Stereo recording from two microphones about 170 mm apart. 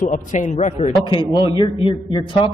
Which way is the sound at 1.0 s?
25° left (ahead or behind).